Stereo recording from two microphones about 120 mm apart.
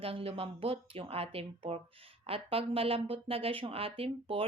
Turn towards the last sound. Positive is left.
turn(degrees=-50)  # may be behind; listen again after turning